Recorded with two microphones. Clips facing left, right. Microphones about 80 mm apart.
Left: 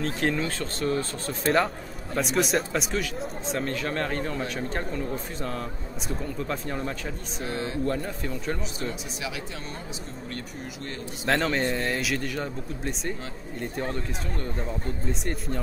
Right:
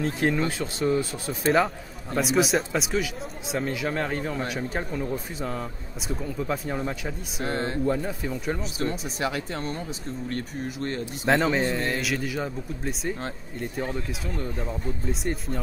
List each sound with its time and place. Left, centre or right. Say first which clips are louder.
0.0 s speech: right 2 dB; centre
7.4 s speech: right 3 dB; right
7.8 s speech: right 2 dB; centre
9.2 s speech: right 9 dB; right
11.2 s speech: right 2 dB; centre